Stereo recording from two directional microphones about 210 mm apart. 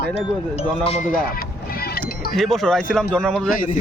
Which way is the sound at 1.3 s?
45° left (ahead or behind).